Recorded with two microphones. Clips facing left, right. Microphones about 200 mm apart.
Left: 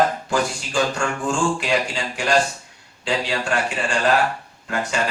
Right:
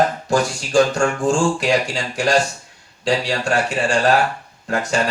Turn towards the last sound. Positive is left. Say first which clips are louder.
# right 4 dB
turn(degrees=-40)  # may be behind; listen again after turning